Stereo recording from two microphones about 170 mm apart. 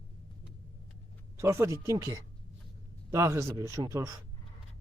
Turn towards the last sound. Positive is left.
turn(degrees=-20)  # may be behind; listen again after turning